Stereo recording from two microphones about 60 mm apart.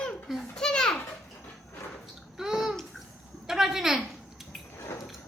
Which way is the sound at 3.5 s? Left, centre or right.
Centre.